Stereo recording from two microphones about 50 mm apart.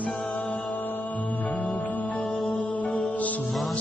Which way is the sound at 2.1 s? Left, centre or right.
Centre.